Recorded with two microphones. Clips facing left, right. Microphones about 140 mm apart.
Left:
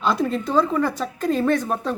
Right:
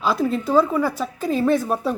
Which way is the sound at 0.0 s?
5° right (ahead or behind).